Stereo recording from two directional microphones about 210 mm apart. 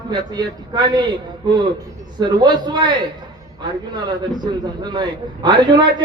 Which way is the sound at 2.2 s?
20° right (ahead or behind).